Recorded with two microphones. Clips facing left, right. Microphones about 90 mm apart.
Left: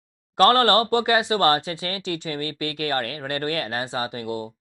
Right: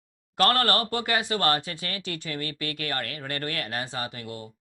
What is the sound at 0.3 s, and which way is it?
Speech, 25° left (ahead or behind).